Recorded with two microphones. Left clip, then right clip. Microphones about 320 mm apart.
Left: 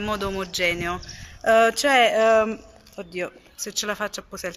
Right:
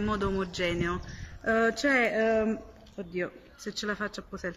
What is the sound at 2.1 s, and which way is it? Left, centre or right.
Speech, left.